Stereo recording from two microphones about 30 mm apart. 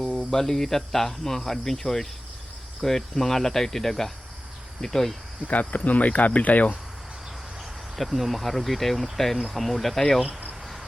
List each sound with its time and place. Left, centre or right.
0.2 s speech: centre
5.5 s speech: left
7.9 s speech: centre